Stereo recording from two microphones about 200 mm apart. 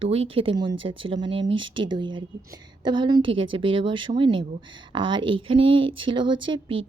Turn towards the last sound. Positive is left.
turn(degrees=-25)  # may be behind; listen again after turning